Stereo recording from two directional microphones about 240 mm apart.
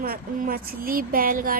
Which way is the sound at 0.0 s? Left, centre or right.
Right.